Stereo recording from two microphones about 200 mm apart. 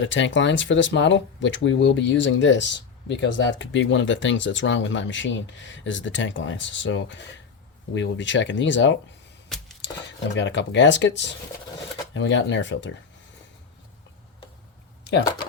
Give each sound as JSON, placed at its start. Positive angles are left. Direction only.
{"t": 0.0, "sound": "speech", "side_deg": 70}
{"t": 10.3, "sound": "speech", "side_deg": 60}